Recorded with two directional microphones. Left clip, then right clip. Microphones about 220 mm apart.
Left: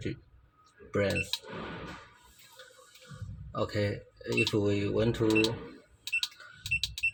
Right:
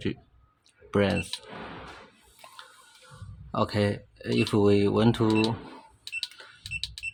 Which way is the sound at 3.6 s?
45° right (ahead or behind).